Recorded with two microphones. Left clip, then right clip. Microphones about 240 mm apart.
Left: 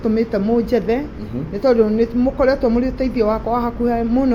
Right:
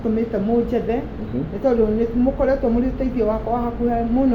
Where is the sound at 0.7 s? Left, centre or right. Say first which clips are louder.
Left 4 dB; left.